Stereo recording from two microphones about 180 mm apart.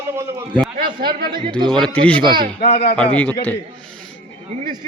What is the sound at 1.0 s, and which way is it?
Speech, 55° right (ahead or behind).